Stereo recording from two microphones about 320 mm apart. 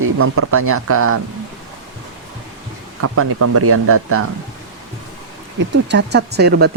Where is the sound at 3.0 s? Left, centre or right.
Right.